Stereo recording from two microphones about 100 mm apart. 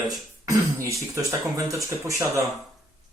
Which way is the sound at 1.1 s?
35° right (ahead or behind).